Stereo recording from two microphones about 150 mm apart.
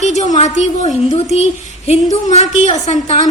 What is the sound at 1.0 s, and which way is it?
A woman's voice, 45° left (ahead or behind).